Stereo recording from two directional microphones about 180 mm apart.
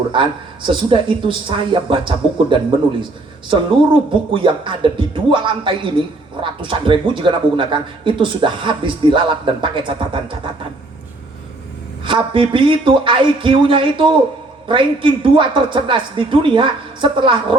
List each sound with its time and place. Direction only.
0.1 s speech: 25° right (ahead or behind)
12.0 s speech: 30° right (ahead or behind)